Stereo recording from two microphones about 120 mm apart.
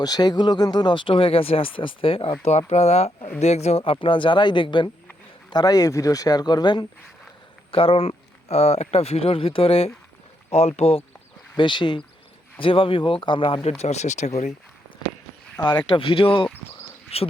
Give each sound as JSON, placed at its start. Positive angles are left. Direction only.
{"t": 0.0, "sound": "speech", "side_deg": 35}
{"t": 2.4, "sound": "speech", "side_deg": 60}
{"t": 4.0, "sound": "speech", "side_deg": 45}
{"t": 7.7, "sound": "speech", "side_deg": 50}
{"t": 11.5, "sound": "speech", "side_deg": 40}
{"t": 15.6, "sound": "speech", "side_deg": 40}